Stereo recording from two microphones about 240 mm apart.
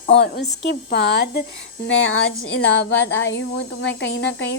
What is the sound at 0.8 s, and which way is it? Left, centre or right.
A woman's voice, left.